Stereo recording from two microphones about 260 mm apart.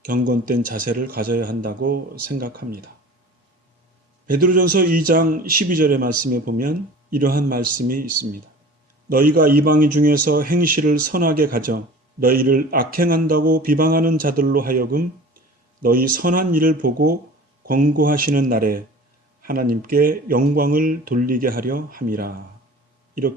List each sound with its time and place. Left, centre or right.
0.0 s a man's voice: right
4.3 s a man's voice: right